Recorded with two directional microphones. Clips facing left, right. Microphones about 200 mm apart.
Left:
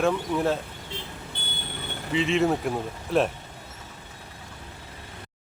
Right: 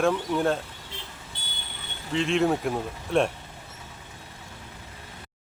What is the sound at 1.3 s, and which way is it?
Vehicle, 60° left (ahead or behind).